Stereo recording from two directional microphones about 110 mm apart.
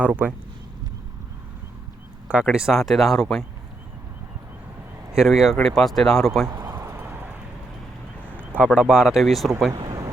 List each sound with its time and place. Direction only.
0.0 s speech: 15° right (ahead or behind)
2.2 s speech: 10° right (ahead or behind)
5.1 s speech: 5° right (ahead or behind)
6.5 s a sound: 30° right (ahead or behind)
6.9 s clip-clop: 15° right (ahead or behind)
8.3 s speech: 15° right (ahead or behind)
9.7 s a sound: 45° right (ahead or behind)